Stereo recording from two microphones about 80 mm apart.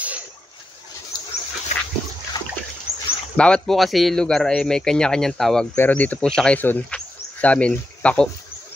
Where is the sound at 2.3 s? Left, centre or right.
Left.